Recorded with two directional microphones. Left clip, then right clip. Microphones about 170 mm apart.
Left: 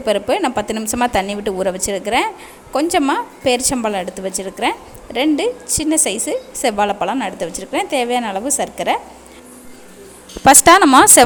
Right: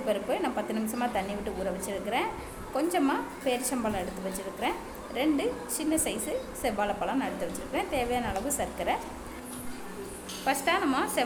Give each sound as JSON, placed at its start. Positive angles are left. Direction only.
{"t": 0.0, "sound": "a woman's voice", "side_deg": 60}
{"t": 10.4, "sound": "a woman's voice", "side_deg": 75}